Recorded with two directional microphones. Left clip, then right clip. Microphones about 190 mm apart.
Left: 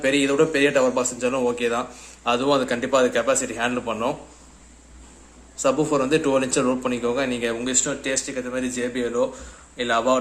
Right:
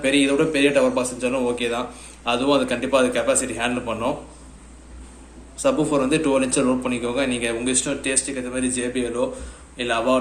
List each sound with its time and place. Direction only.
0.0 s a man's voice: 45° left (ahead or behind)
5.5 s a man's voice: 40° left (ahead or behind)